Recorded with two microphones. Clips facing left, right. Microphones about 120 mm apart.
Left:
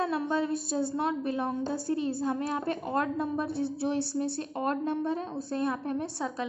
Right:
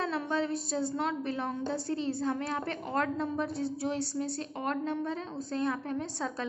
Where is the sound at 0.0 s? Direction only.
20° left (ahead or behind).